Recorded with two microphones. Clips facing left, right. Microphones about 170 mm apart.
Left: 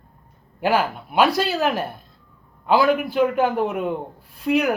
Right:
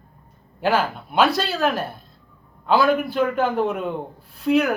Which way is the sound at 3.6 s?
5° left (ahead or behind).